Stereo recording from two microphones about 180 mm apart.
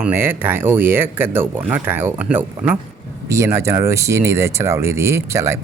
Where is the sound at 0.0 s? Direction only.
10° right (ahead or behind).